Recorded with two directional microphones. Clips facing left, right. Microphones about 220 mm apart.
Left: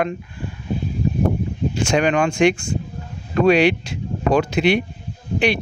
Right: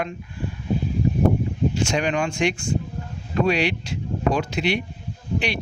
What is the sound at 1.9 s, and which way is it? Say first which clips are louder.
Speech: left 5 dB; 55° left (ahead or behind).